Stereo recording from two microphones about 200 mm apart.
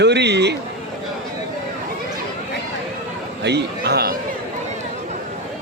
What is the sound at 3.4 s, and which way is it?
Speech, 55° right (ahead or behind).